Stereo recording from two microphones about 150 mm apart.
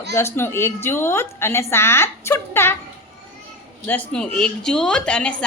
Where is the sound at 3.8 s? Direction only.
10° left (ahead or behind).